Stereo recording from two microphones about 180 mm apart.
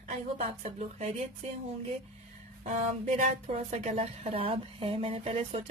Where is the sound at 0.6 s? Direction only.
40° right (ahead or behind).